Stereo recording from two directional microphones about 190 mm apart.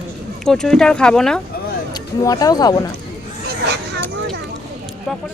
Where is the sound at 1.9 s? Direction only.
20° left (ahead or behind).